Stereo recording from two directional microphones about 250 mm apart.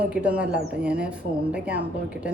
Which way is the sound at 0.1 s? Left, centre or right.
Centre.